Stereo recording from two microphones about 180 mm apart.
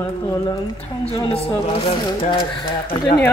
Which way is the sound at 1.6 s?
35° left (ahead or behind).